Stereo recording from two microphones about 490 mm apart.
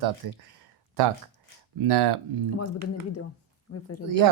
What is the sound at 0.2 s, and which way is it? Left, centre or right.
Speech, right.